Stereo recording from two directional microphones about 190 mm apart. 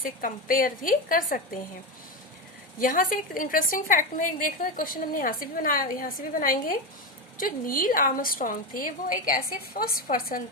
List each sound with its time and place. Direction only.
0.0 s a woman's voice: 45° left (ahead or behind)
2.7 s a woman's voice: 45° left (ahead or behind)